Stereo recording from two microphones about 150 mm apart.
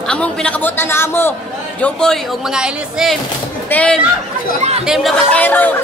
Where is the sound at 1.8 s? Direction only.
5° left (ahead or behind).